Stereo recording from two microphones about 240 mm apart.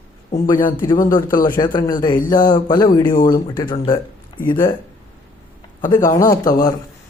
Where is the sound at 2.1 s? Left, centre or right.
Left.